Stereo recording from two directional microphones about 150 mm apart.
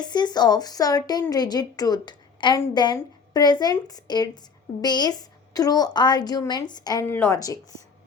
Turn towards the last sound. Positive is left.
turn(degrees=20)  # may be behind; listen again after turning